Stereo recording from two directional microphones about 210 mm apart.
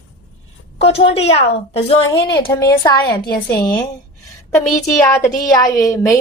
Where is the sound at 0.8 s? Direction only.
30° left (ahead or behind).